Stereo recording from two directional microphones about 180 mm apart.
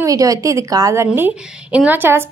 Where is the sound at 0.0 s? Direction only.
20° right (ahead or behind).